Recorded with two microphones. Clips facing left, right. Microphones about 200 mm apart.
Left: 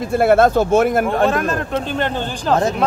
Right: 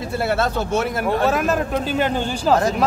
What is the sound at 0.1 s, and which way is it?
Speech, 50° left (ahead or behind).